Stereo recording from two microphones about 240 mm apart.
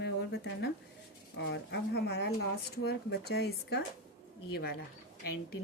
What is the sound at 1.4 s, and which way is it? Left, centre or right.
A woman's voice, left.